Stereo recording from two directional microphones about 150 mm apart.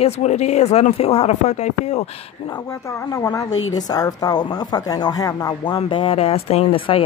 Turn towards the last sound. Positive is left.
turn(degrees=35)  # may be behind; listen again after turning